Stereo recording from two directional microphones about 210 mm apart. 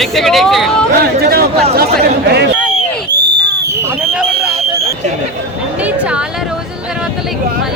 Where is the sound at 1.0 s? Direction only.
50° right (ahead or behind).